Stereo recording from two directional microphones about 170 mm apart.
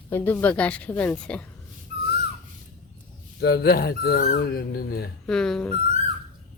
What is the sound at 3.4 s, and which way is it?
Speech, 70° left (ahead or behind).